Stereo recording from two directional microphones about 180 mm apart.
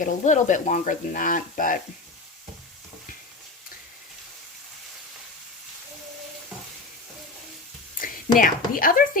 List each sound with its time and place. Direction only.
0.0 s speech: 45° left (ahead or behind)
7.9 s speech: 50° left (ahead or behind)